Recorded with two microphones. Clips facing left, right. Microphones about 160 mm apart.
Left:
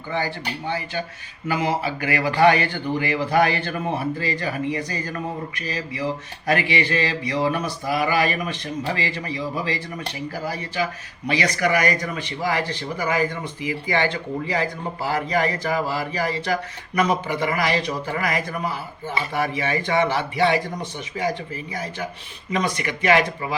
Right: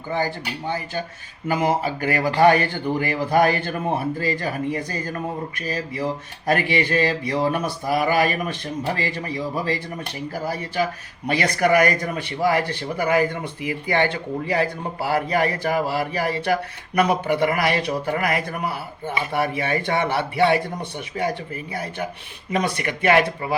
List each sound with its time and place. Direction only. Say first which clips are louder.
0.1 s speech: right 1 dB; 45° right (ahead or behind)
11.3 s speech: right 2 dB; 50° right (ahead or behind)